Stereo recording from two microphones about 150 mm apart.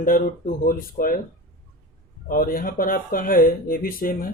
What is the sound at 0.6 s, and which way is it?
Speech, 75° left (ahead or behind).